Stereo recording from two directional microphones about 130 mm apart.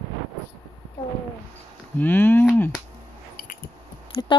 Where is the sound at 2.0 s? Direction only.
15° left (ahead or behind).